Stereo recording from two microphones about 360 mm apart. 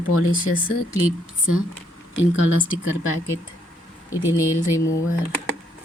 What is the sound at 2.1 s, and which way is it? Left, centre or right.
Speech, left.